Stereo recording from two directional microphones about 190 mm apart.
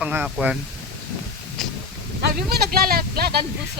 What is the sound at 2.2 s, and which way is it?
Speech, 55° right (ahead or behind).